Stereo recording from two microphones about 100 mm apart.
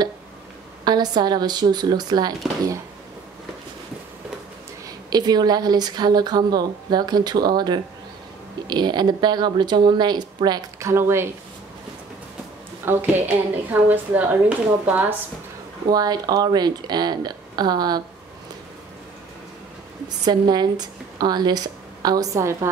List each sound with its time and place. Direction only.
0.8 s speech: 45° right (ahead or behind)
4.8 s speech: 45° right (ahead or behind)
10.8 s speech: 30° right (ahead or behind)
12.8 s a woman's voice: 20° right (ahead or behind)
15.9 s speech: 40° right (ahead or behind)
20.2 s a woman's voice: 45° right (ahead or behind); by 22.7 s 30° right (ahead or behind)